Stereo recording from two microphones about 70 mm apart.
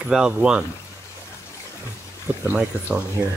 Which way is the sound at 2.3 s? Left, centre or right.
Right.